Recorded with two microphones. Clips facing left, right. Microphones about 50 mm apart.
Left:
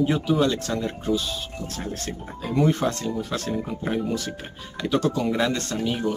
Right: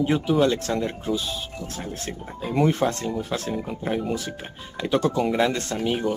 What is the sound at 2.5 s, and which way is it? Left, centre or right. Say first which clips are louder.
Speech: even; right.